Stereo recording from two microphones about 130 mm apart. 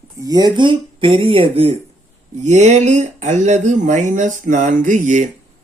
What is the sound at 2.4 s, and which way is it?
Speech, 65° right (ahead or behind).